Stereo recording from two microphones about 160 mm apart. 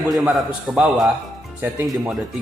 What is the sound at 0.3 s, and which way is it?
A man's voice, centre (ahead or behind).